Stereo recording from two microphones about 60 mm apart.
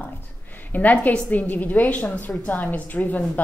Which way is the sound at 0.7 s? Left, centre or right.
Left.